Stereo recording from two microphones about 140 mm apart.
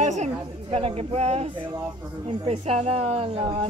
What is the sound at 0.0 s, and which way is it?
A woman's voice, 50° right (ahead or behind).